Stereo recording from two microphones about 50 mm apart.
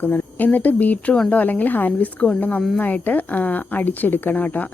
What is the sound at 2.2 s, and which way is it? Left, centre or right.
Speech, left.